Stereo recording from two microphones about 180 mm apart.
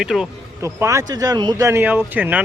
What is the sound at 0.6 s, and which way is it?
Speech, 15° right (ahead or behind).